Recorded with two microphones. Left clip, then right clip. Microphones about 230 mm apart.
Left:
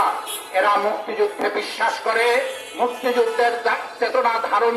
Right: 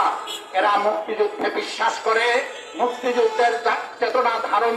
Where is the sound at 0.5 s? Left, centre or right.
Left.